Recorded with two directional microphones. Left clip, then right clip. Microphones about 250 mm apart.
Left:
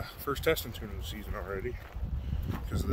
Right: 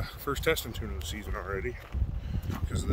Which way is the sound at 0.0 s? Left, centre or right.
Centre.